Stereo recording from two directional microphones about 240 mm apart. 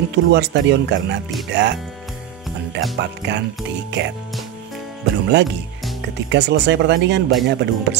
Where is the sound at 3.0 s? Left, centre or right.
Right.